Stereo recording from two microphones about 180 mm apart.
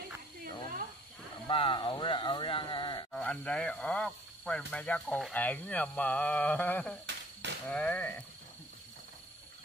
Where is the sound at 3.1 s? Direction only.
5° left (ahead or behind).